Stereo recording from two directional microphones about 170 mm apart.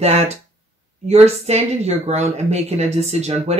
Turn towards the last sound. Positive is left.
turn(degrees=-40)  # may be behind; listen again after turning